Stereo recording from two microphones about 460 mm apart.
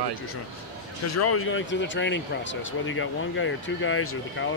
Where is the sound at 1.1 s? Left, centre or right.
Left.